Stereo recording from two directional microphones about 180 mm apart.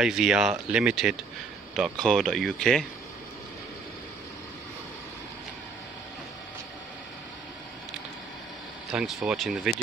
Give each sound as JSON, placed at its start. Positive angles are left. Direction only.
{"t": 0.0, "sound": "speech", "side_deg": -5}
{"t": 8.9, "sound": "speech", "side_deg": -5}